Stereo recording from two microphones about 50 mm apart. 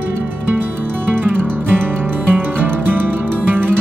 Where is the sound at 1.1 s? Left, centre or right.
Right.